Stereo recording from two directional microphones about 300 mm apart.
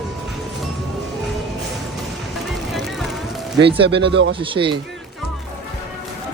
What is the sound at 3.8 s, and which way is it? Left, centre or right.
Speech, right.